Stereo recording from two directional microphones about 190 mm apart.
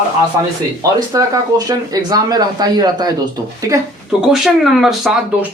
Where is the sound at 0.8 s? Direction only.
20° right (ahead or behind).